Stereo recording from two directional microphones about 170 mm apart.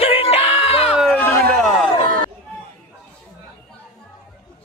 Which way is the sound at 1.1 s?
10° left (ahead or behind).